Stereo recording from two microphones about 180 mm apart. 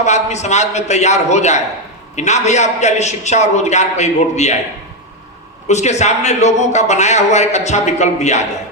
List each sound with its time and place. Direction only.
0.0 s a man's voice: 40° left (ahead or behind)
5.6 s a man's voice: 40° left (ahead or behind)